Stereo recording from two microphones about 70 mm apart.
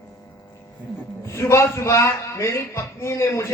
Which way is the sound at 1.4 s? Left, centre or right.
Left.